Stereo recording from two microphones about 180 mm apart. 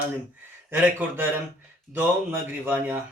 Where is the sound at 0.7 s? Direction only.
10° right (ahead or behind).